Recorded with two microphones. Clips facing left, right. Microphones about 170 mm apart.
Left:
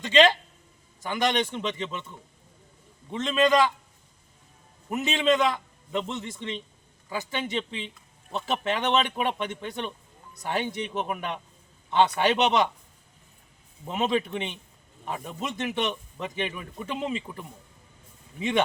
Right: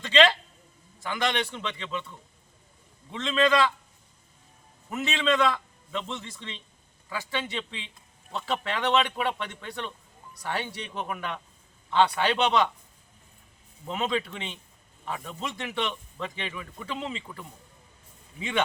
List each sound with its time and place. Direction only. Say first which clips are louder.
0.0 s a man's voice: left 2 dB; 15° left (ahead or behind)
3.1 s a man's voice: left 2 dB; 20° left (ahead or behind)
4.9 s a man's voice: left 3 dB; 20° left (ahead or behind)
13.8 s a man's voice: left 3 dB; 20° left (ahead or behind)